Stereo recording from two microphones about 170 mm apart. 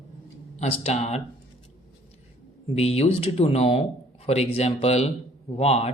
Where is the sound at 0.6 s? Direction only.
40° left (ahead or behind).